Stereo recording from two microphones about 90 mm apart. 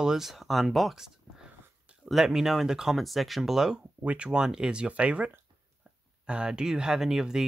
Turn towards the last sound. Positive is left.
turn(degrees=-5)  # may be behind; listen again after turning